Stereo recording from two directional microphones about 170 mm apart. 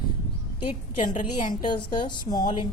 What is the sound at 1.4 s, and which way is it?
A woman's voice, 25° left (ahead or behind).